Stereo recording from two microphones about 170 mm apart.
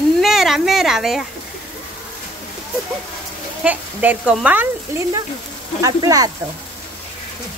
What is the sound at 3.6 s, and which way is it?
Speech, 10° right (ahead or behind).